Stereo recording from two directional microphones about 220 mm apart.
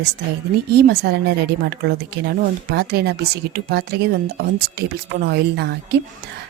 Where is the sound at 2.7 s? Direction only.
45° right (ahead or behind).